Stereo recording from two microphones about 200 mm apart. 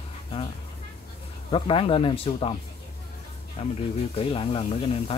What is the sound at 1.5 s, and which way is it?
Speech, 25° left (ahead or behind).